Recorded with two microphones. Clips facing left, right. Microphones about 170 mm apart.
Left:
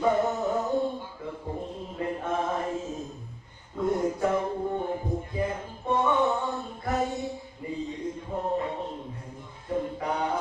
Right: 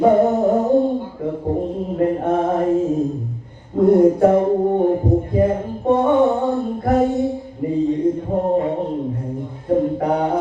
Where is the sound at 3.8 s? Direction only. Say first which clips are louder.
Right 14 dB; 55° right (ahead or behind).